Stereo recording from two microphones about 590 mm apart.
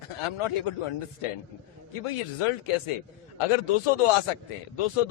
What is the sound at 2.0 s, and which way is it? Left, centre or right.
A man's voice, left.